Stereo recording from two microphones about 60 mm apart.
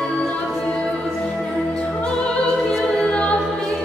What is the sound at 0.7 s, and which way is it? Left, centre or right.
Music, centre.